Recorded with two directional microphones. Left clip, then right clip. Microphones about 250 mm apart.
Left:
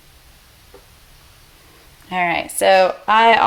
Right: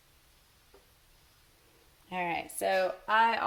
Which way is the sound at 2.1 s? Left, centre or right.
Left.